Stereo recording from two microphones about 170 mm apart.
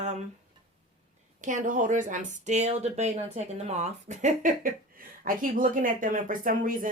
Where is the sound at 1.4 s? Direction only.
50° right (ahead or behind).